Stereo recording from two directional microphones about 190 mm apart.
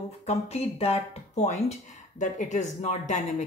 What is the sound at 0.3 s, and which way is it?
Speech, 35° left (ahead or behind).